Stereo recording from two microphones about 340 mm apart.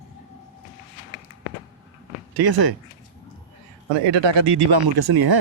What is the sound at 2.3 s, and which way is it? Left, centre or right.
Speech, right.